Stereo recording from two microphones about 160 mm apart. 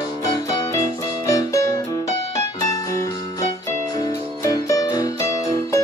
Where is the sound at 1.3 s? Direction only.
20° left (ahead or behind).